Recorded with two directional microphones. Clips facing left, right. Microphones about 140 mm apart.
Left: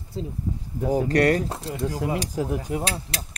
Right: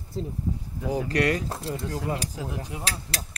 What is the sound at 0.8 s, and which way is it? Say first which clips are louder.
Speech: left 5 dB; 45° left (ahead or behind).